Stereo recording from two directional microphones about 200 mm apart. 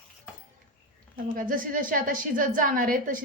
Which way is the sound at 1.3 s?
45° right (ahead or behind).